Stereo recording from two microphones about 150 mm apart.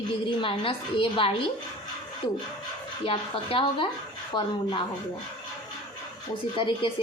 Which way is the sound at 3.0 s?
35° left (ahead or behind).